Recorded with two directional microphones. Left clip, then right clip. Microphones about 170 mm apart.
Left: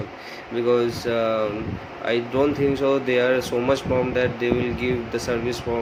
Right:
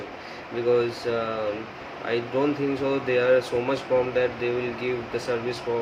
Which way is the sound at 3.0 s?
55° left (ahead or behind).